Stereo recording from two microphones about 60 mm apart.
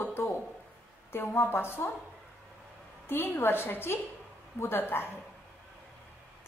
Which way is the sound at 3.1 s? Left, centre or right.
Left.